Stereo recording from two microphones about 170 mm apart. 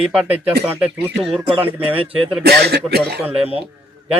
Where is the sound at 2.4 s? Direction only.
70° right (ahead or behind).